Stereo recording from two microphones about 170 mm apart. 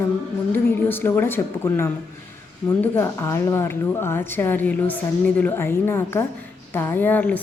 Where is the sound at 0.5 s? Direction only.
10° left (ahead or behind).